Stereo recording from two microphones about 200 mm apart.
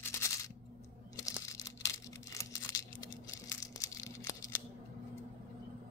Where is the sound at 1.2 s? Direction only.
15° left (ahead or behind).